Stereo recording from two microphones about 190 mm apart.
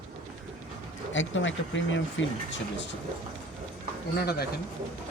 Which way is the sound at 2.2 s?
90° left.